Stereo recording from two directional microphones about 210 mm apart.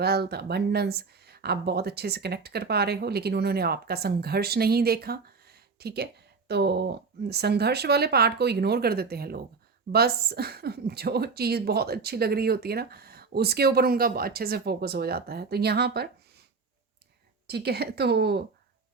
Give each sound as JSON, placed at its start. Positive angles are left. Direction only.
{"t": 0.0, "sound": "speech", "side_deg": -50}
{"t": 17.4, "sound": "speech", "side_deg": -50}